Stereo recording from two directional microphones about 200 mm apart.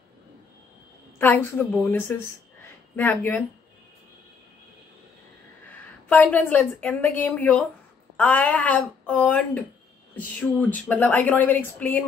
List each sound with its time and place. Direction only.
1.1 s speech: 10° left (ahead or behind)
5.7 s a woman's voice: 10° left (ahead or behind)